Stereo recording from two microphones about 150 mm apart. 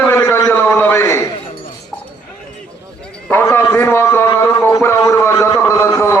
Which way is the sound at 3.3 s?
15° left (ahead or behind).